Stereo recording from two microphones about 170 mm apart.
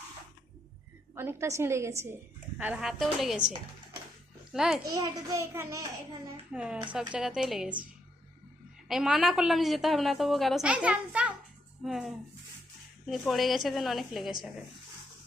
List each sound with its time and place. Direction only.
1.1 s a woman's voice: 15° right (ahead or behind)
2.6 s a woman's voice: 5° right (ahead or behind)
4.5 s a woman's voice: 5° right (ahead or behind)
4.8 s a child's voice: 20° right (ahead or behind)
6.5 s a woman's voice: 5° right (ahead or behind)
8.9 s a woman's voice: 5° right (ahead or behind)